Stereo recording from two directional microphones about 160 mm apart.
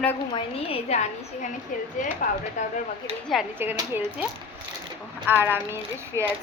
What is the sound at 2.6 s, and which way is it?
Speech, 50° left (ahead or behind).